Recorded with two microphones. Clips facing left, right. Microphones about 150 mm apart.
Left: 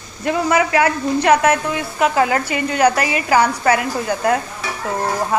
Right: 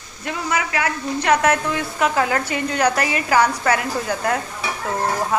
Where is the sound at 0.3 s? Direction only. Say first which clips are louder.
Left 7 dB; 60° left (ahead or behind).